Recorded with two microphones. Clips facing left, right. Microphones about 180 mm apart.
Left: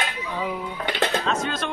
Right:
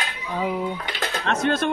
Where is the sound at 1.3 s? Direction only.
55° right (ahead or behind).